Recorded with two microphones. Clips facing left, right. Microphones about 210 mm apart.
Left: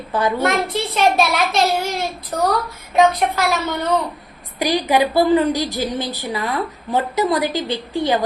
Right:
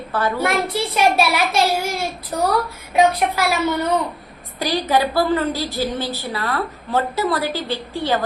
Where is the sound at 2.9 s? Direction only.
10° right (ahead or behind).